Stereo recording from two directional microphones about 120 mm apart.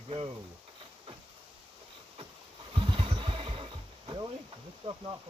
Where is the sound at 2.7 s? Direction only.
45° right (ahead or behind).